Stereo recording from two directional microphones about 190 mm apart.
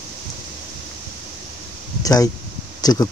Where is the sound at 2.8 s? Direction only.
20° left (ahead or behind).